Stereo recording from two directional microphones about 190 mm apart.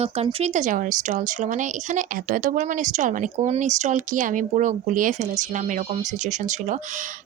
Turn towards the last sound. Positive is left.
turn(degrees=-40)  # may be behind; listen again after turning